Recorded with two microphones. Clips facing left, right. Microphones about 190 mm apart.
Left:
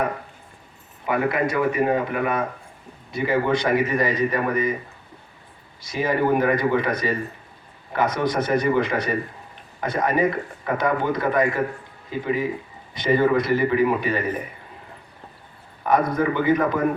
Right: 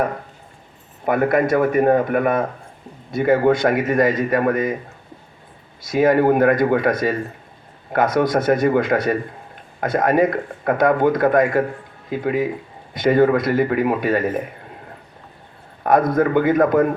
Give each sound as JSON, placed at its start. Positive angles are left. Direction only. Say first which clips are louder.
{"t": 1.0, "sound": "speech", "louder": "right 5 dB", "side_deg": -50}
{"t": 5.8, "sound": "speech", "louder": "right 7 dB", "side_deg": -50}
{"t": 15.8, "sound": "speech", "louder": "right 4 dB", "side_deg": -50}